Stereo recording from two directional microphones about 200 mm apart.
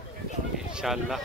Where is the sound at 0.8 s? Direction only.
Centre (ahead or behind).